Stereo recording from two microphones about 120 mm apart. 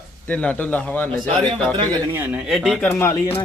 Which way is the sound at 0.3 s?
10° left (ahead or behind).